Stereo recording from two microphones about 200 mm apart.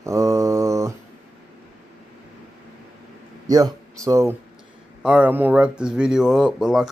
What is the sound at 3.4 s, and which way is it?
Speech, 20° right (ahead or behind).